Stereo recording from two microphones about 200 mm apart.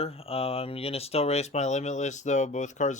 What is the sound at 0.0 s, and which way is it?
Speech, 30° left (ahead or behind).